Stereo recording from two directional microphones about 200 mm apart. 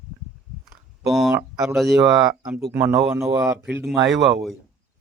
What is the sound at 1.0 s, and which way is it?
Speech, centre (ahead or behind).